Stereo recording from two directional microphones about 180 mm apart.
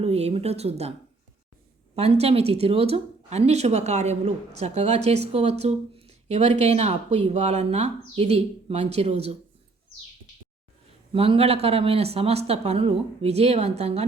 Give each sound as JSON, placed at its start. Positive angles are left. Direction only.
{"t": 0.0, "sound": "speech", "side_deg": -35}
{"t": 2.0, "sound": "speech", "side_deg": -35}
{"t": 11.1, "sound": "speech", "side_deg": -30}